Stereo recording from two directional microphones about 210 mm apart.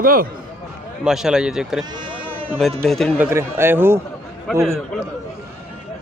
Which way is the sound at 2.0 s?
25° right (ahead or behind).